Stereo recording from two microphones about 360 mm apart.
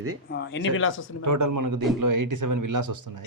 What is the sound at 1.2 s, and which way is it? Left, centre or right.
Speech, right.